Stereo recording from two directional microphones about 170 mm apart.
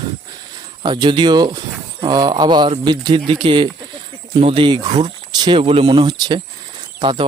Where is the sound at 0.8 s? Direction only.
25° right (ahead or behind).